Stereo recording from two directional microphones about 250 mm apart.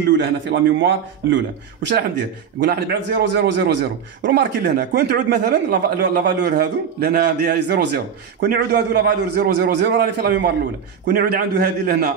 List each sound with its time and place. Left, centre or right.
0.2 s a man's voice: right